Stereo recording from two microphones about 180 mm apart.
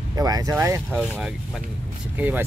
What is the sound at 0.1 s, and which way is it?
Speech, 20° right (ahead or behind).